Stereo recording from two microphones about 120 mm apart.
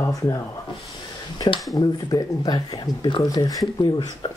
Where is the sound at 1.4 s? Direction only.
30° left (ahead or behind).